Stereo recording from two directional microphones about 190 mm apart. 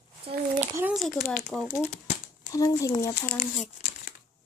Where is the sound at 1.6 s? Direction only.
35° left (ahead or behind).